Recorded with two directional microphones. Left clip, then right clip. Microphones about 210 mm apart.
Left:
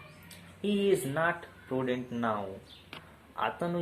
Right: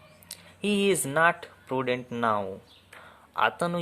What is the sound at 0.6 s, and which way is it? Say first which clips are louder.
Speech: right 3 dB; 50° right (ahead or behind).